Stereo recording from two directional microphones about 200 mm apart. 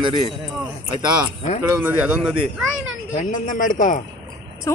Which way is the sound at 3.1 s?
40° left (ahead or behind).